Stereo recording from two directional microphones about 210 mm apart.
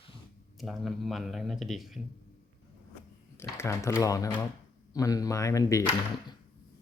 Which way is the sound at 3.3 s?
10° left (ahead or behind).